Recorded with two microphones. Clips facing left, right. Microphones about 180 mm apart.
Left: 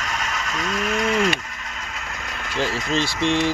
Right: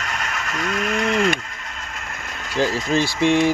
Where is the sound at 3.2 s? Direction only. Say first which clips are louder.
Right 5 dB; 10° right (ahead or behind).